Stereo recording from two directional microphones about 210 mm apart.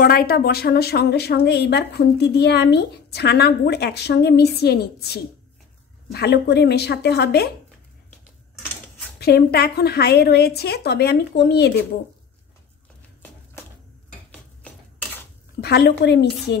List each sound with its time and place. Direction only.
0.0 s speech: 45° left (ahead or behind)
9.2 s speech: 50° left (ahead or behind)
14.6 s a sound: 5° left (ahead or behind)
15.6 s speech: 50° left (ahead or behind)